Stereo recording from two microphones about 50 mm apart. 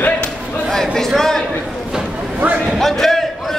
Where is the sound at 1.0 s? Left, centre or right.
Centre.